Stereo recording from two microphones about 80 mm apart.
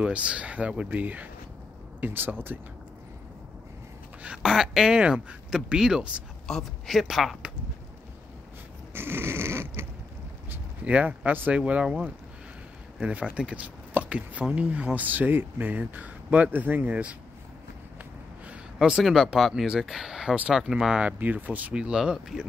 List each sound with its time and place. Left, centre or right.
0.0 s speech: centre
4.4 s speech: centre
6.4 s speech: centre
8.9 s snoring: right
10.5 s speech: centre
18.5 s speech: centre